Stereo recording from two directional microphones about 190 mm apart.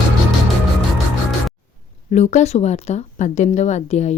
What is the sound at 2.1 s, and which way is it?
Speech, 35° left (ahead or behind).